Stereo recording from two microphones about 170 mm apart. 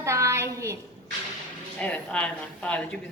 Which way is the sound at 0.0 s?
15° right (ahead or behind).